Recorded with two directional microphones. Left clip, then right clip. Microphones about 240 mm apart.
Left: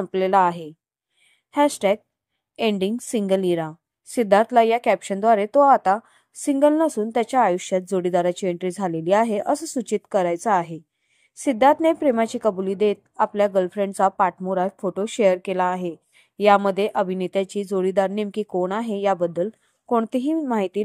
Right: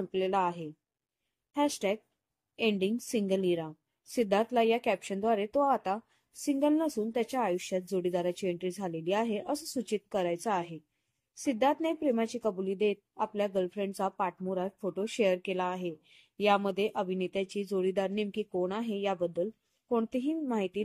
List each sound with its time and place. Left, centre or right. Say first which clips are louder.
0.1 s a woman's voice: left 12 dB; centre